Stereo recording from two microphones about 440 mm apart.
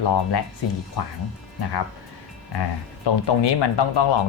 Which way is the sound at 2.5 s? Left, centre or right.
Left.